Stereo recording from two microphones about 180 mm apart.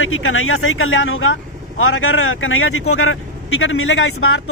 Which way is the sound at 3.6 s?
90° left.